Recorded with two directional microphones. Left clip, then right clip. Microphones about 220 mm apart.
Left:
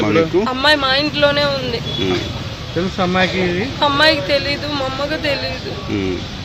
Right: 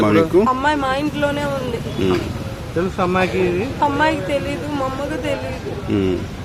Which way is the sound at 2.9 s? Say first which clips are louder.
Left 2 dB; 45° left (ahead or behind).